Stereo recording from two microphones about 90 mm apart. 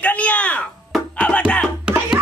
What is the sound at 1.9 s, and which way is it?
Music, 10° right (ahead or behind).